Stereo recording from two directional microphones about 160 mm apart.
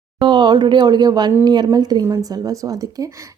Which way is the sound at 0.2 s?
30° right (ahead or behind).